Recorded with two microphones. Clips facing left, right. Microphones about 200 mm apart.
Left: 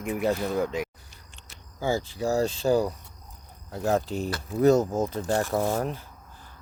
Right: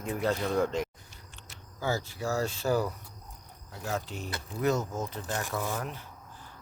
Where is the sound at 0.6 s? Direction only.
5° left (ahead or behind).